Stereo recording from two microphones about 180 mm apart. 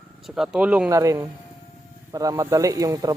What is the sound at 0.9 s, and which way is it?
Speech, 15° right (ahead or behind).